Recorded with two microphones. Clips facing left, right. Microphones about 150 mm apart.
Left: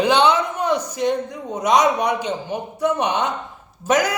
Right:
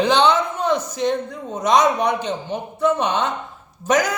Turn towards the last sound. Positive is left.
turn(degrees=5)  # may be behind; listen again after turning